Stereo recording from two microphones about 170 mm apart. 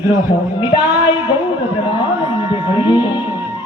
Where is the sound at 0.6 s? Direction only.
25° left (ahead or behind).